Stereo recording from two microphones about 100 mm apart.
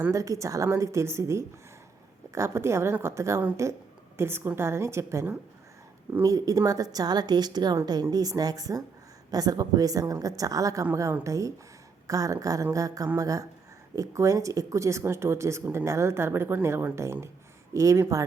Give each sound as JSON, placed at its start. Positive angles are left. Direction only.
{"t": 0.1, "sound": "a woman's voice", "side_deg": -35}
{"t": 6.2, "sound": "a woman's voice", "side_deg": -35}